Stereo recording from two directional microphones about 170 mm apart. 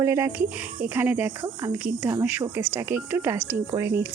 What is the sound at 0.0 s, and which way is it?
Speech, 15° right (ahead or behind).